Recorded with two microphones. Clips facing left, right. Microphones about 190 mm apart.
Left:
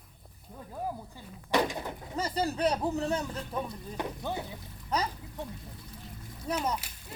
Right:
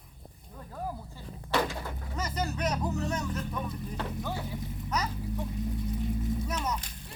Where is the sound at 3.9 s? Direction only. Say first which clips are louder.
Left 3 dB; 15° left (ahead or behind).